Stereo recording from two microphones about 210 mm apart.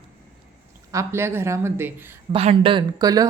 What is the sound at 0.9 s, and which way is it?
Speech, 15° right (ahead or behind).